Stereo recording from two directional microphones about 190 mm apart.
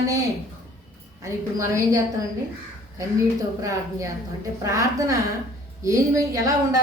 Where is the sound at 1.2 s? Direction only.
15° right (ahead or behind).